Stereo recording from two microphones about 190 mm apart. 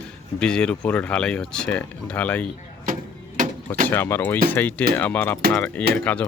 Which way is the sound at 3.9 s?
10° left (ahead or behind).